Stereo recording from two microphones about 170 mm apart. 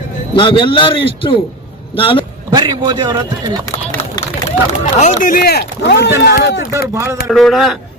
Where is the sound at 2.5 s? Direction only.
25° right (ahead or behind).